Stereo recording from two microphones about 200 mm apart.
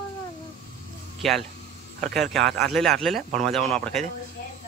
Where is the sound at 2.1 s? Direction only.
Centre (ahead or behind).